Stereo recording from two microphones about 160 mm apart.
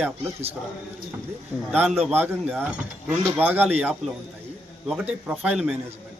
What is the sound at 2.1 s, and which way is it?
A man's voice, 10° right (ahead or behind).